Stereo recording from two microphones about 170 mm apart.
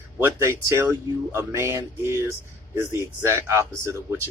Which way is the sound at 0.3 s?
15° right (ahead or behind).